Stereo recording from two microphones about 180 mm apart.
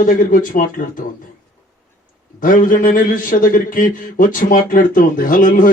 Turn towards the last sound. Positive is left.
turn(degrees=50)  # may be behind; listen again after turning